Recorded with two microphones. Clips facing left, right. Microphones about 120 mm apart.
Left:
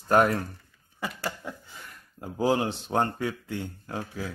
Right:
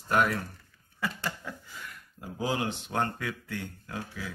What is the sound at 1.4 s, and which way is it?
Speech, 20° left (ahead or behind).